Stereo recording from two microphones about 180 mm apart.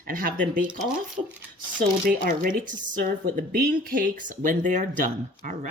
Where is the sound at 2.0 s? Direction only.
50° right (ahead or behind).